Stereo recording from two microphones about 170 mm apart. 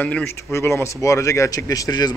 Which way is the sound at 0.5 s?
15° left (ahead or behind).